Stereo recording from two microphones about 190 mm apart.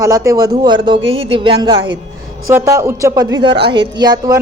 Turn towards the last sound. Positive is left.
turn(degrees=-20)  # may be behind; listen again after turning